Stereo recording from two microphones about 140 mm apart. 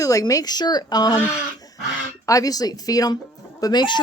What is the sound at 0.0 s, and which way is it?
Speech, 25° left (ahead or behind).